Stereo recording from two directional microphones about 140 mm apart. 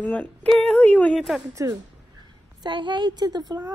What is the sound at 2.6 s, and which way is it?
Speech, 35° right (ahead or behind).